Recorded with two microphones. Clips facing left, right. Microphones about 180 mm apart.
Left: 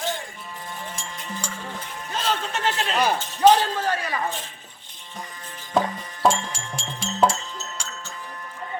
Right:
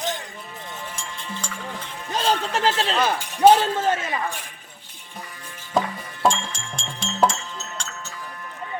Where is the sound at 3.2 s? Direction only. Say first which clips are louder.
Right 3 dB; 15° right (ahead or behind).